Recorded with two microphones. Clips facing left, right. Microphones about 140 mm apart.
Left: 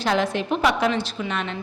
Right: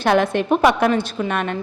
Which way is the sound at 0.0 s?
55° right (ahead or behind).